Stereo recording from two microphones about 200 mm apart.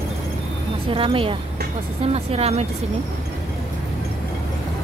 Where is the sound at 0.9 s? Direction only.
25° right (ahead or behind).